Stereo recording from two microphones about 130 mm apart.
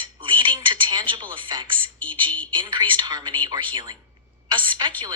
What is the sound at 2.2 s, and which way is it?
Speech, 10° left (ahead or behind).